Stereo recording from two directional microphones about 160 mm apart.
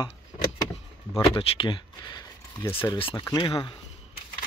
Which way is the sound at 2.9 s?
35° left (ahead or behind).